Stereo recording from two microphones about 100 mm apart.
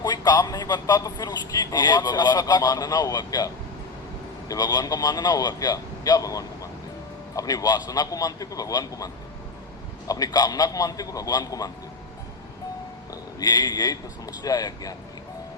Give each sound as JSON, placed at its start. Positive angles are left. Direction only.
{"t": 0.0, "sound": "a man's voice", "side_deg": 40}
{"t": 10.1, "sound": "a man's voice", "side_deg": 40}
{"t": 13.4, "sound": "a man's voice", "side_deg": 40}